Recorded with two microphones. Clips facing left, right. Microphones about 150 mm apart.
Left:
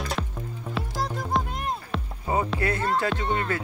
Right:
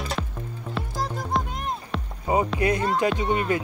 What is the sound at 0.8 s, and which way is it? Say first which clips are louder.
Music: even; centre (ahead or behind).